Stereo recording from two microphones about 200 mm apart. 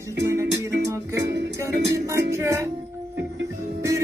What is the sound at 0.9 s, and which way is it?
Music, 15° right (ahead or behind).